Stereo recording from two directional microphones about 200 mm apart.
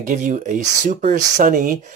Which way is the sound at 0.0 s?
40° right (ahead or behind).